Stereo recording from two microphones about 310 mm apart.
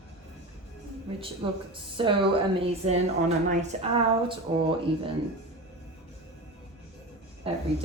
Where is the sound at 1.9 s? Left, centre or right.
Centre.